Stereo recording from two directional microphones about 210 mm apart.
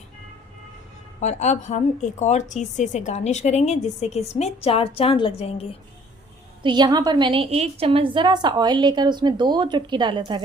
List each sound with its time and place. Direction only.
1.2 s a woman's voice: 35° left (ahead or behind)
6.6 s a woman's voice: 20° right (ahead or behind)